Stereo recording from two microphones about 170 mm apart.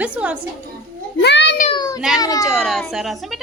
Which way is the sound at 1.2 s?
90° left.